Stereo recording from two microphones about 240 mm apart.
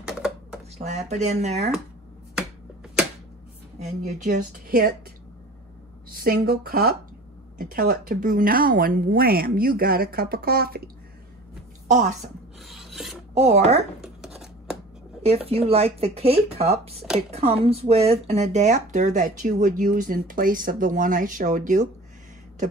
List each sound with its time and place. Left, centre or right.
0.0 s computer keyboard: centre
0.7 s speech: right
4.2 s speech: right
6.0 s speech: right
11.9 s speech: right
12.6 s filing: centre
13.3 s speech: right
14.0 s a sound: centre
15.2 s speech: right